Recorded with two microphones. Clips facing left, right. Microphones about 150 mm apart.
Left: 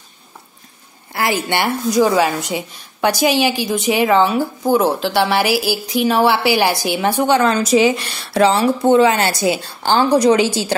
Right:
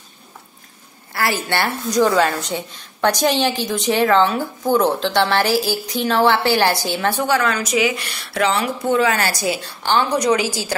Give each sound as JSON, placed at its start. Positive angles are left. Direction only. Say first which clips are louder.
{"t": 1.1, "sound": "a woman's voice", "louder": "left 2 dB", "side_deg": 15}